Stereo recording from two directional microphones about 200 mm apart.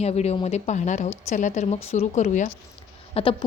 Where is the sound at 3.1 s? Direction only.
25° left (ahead or behind).